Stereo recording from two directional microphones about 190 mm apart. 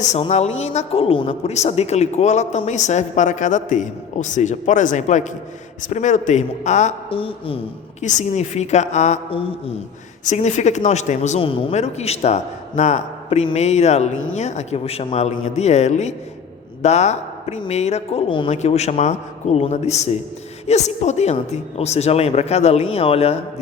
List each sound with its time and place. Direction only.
0.0 s a man's voice: 35° left (ahead or behind)
8.0 s a man's voice: 40° left (ahead or behind)